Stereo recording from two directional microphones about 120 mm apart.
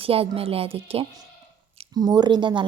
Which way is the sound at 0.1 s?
55° right (ahead or behind).